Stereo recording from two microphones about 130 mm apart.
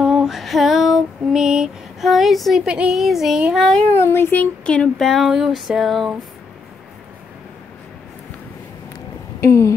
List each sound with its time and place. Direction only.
0.0 s female singing: 5° right (ahead or behind)
3.9 s speech: 20° left (ahead or behind); by 6.1 s centre (ahead or behind)
9.4 s speech: 20° left (ahead or behind)